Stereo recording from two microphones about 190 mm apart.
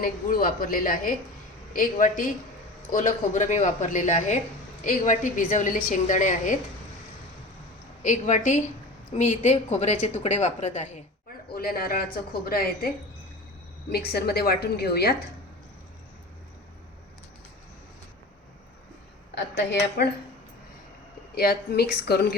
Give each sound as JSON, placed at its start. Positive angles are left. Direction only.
{"t": 0.0, "sound": "a woman's voice", "side_deg": 45}
{"t": 8.0, "sound": "a woman's voice", "side_deg": 40}
{"t": 11.5, "sound": "a woman's voice", "side_deg": 50}
{"t": 13.9, "sound": "a woman's voice", "side_deg": 55}
{"t": 19.3, "sound": "a woman's voice", "side_deg": 60}
{"t": 21.3, "sound": "a woman's voice", "side_deg": 55}